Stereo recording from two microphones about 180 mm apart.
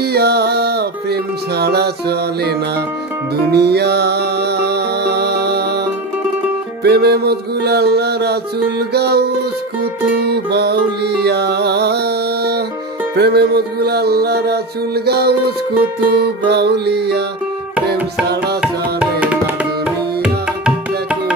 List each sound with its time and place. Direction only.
0.0 s music: 65° right (ahead or behind)
3.5 s music: 65° right (ahead or behind)
6.8 s music: 65° right (ahead or behind)
18.2 s music: 65° right (ahead or behind)
18.6 s music: 5° right (ahead or behind)